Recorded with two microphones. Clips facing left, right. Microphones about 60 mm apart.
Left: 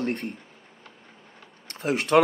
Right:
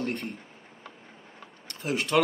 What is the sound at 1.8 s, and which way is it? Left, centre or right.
Speech, left.